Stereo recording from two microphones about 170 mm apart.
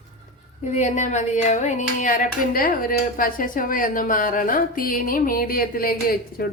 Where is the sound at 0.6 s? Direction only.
45° left (ahead or behind).